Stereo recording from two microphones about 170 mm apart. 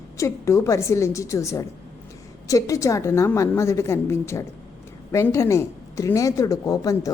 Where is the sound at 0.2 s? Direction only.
15° left (ahead or behind).